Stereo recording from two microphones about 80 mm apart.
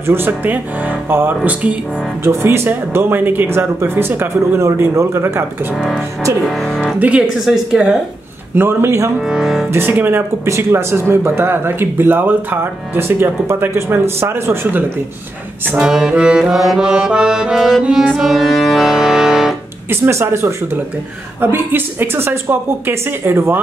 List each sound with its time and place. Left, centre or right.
0.0 s speech: right
2.2 s speech: right
7.0 s brass instrument: centre
7.4 s music: centre
8.5 s speech: right
9.3 s music: centre
9.7 s speech: right
10.4 s speech: right
15.7 s brass instrument: centre
18.2 s music: centre
19.9 s speech: right